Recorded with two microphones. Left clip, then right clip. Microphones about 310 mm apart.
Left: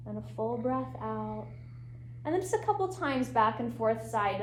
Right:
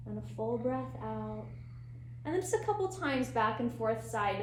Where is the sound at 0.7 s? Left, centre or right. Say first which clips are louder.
Left 3 dB; left.